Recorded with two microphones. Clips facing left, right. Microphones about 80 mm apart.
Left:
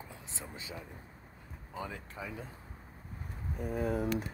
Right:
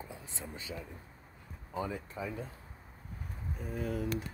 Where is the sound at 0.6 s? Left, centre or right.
Left.